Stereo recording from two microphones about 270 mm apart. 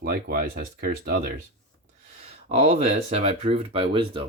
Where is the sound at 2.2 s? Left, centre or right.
Right.